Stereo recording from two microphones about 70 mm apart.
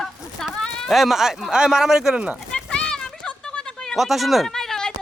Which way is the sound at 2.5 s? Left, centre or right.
Centre.